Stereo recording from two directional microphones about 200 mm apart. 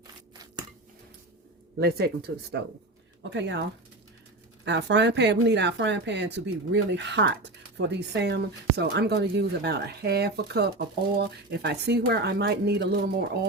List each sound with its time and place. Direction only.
1.8 s a woman's voice: 50° right (ahead or behind)